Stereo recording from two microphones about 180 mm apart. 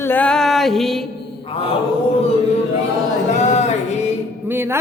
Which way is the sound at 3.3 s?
40° left (ahead or behind).